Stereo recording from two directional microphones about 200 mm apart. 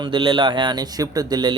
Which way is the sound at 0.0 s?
25° right (ahead or behind).